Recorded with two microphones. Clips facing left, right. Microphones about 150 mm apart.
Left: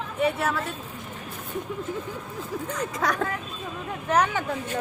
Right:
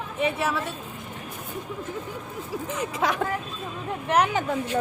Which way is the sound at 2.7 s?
5° right (ahead or behind).